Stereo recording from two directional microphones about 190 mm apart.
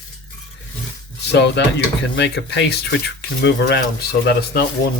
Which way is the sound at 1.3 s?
65° left (ahead or behind).